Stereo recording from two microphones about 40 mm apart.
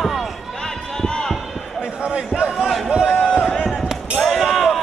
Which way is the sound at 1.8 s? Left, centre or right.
Right.